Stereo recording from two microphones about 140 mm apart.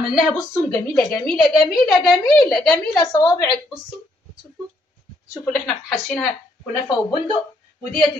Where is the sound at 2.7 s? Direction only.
25° left (ahead or behind).